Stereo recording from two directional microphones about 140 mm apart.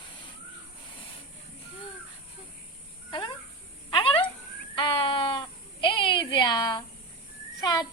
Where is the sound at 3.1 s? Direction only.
35° left (ahead or behind).